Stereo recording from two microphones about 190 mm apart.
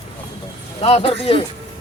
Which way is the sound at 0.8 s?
30° left (ahead or behind).